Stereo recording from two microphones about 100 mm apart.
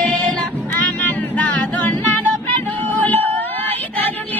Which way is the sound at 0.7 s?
15° left (ahead or behind).